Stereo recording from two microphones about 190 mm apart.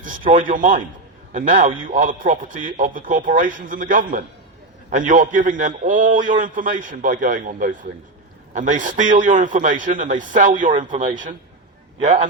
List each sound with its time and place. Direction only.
0.0 s a man's voice: 45° right (ahead or behind)